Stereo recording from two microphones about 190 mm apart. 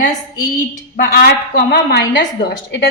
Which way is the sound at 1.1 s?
55° left (ahead or behind).